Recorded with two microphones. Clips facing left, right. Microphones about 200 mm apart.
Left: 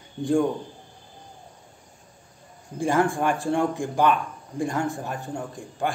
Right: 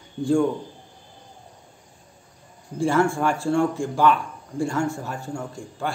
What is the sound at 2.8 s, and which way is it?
Speech, 15° left (ahead or behind).